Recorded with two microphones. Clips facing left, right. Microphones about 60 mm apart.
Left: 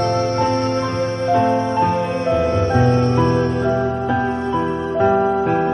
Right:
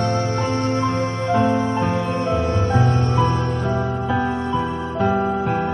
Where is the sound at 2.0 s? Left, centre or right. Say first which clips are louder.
Left 3 dB; left.